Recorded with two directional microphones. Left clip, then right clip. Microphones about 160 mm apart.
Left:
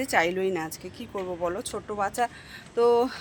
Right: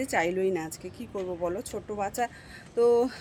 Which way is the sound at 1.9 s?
20° right (ahead or behind).